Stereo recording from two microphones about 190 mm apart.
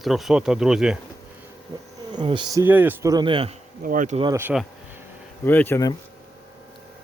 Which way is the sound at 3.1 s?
25° right (ahead or behind).